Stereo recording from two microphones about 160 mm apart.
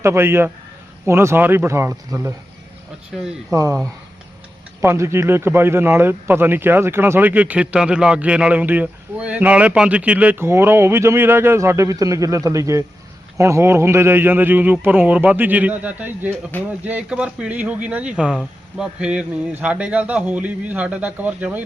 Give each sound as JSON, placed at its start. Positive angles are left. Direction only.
{"t": 0.0, "sound": "a man's voice", "side_deg": -15}
{"t": 3.5, "sound": "speech", "side_deg": -20}
{"t": 4.8, "sound": "a man's voice", "side_deg": -15}
{"t": 16.3, "sound": "speech", "side_deg": 10}
{"t": 16.8, "sound": "a man's voice", "side_deg": -5}